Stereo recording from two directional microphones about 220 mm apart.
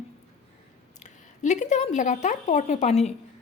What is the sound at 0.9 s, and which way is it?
A woman's voice, 35° left (ahead or behind).